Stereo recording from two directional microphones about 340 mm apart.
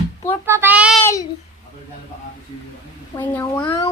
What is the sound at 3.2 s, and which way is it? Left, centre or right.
Speech, centre.